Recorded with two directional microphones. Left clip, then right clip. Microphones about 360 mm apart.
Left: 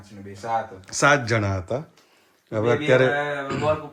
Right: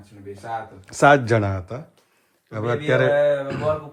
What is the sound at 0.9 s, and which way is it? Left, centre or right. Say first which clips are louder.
Speech: right 4 dB; centre.